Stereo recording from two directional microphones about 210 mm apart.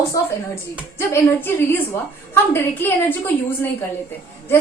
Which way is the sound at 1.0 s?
10° left (ahead or behind).